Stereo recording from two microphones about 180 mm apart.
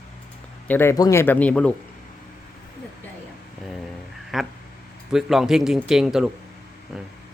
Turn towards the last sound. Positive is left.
turn(degrees=0)  # may be behind; listen again after turning